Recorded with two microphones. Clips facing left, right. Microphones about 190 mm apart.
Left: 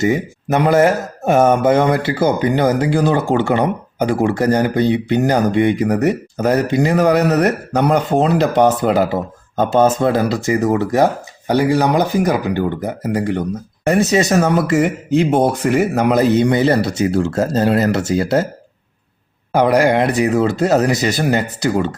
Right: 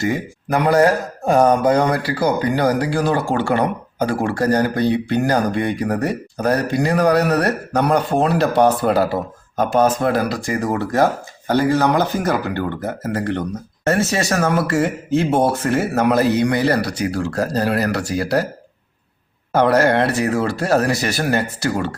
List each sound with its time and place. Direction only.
0.0 s speech: 20° left (ahead or behind)
19.5 s speech: 15° left (ahead or behind)